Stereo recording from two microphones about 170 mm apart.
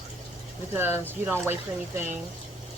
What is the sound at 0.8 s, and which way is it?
Speech, 15° right (ahead or behind).